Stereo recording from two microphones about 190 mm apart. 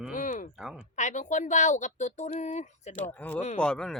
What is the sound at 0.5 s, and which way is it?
Speech, 5° right (ahead or behind).